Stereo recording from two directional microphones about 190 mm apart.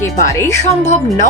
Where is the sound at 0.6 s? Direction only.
35° left (ahead or behind).